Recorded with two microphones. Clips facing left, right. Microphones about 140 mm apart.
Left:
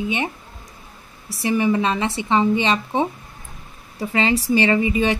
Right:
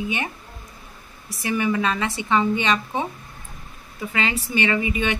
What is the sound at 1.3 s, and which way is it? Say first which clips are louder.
Speech: left 4 dB; 30° left (ahead or behind).